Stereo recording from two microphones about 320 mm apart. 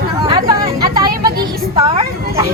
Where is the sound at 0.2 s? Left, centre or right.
Centre.